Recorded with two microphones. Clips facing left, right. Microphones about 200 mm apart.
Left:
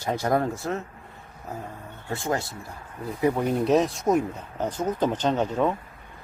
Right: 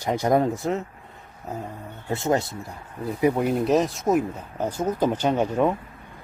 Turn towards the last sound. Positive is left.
turn(degrees=-10)  # may be behind; listen again after turning